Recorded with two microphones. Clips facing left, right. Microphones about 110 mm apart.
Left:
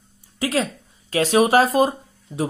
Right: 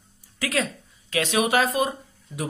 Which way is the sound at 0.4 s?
30° left (ahead or behind).